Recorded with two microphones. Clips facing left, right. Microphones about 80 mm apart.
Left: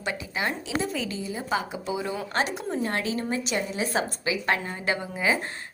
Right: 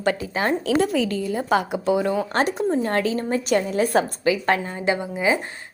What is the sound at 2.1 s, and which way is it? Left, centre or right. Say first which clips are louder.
A woman's voice: right 6 dB; right.